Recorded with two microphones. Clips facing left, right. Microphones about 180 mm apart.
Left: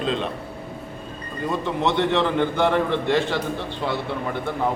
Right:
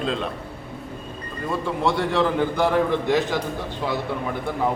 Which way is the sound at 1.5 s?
5° right (ahead or behind).